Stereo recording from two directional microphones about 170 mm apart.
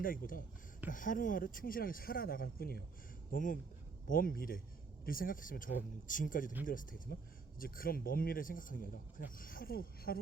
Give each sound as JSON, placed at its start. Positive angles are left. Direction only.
{"t": 0.0, "sound": "speech", "side_deg": 55}